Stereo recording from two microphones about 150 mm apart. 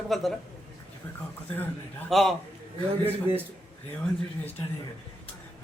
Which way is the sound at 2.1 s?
Centre (ahead or behind).